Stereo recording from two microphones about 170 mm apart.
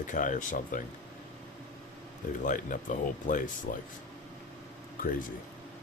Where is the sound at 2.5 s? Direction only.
50° left (ahead or behind).